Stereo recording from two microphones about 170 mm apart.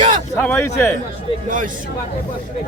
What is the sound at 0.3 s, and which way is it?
Speech, 10° left (ahead or behind).